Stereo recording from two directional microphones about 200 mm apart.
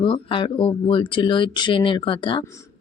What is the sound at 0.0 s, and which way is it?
Speech, 25° left (ahead or behind).